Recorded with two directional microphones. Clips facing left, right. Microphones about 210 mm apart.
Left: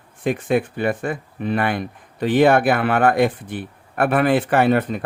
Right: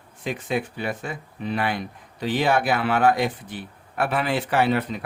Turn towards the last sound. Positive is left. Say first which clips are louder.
# left 5 dB
turn(degrees=50)  # may be behind; listen again after turning